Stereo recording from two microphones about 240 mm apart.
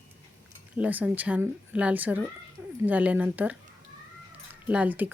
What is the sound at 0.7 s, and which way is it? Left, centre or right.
Speech, centre.